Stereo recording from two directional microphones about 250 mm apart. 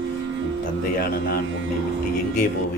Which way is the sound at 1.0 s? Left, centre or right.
Left.